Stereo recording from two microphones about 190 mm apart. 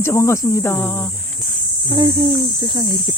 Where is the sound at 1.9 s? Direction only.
20° right (ahead or behind).